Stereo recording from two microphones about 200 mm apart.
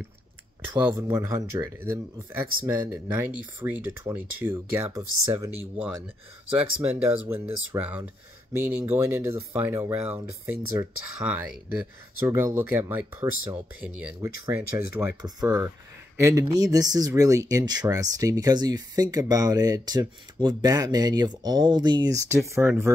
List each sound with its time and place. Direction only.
0.7 s speech: 15° right (ahead or behind)
6.8 s speech: 10° right (ahead or behind)
13.7 s speech: 5° right (ahead or behind)